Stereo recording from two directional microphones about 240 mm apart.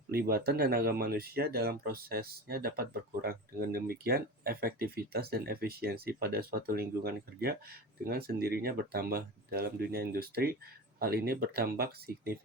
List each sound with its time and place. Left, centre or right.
0.1 s speech: right